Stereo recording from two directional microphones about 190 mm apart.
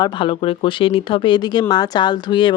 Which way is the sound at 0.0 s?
25° left (ahead or behind).